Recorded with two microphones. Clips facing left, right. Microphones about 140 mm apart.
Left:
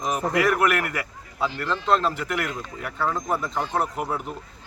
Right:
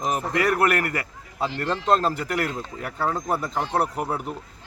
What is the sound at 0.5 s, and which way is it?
A man's voice, 40° right (ahead or behind).